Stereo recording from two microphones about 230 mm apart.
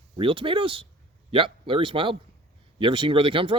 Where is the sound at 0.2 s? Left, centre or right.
Right.